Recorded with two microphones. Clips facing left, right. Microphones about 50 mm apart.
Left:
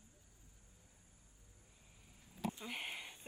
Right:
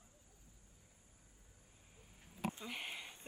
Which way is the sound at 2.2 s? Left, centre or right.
Right.